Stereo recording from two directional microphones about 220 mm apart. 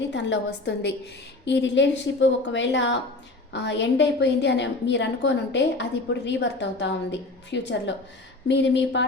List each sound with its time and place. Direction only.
0.1 s a woman's voice: 50° left (ahead or behind)